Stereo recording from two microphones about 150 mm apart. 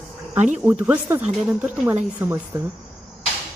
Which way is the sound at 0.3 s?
50° right (ahead or behind).